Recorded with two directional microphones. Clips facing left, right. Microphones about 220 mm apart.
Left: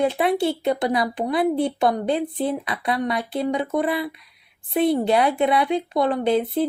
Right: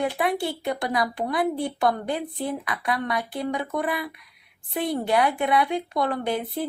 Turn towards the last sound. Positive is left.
turn(degrees=20)  # may be behind; listen again after turning